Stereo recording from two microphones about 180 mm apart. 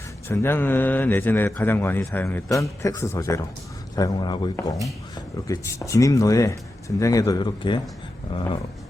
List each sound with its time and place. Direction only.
0.3 s a man's voice: 10° left (ahead or behind); by 8.6 s 30° left (ahead or behind)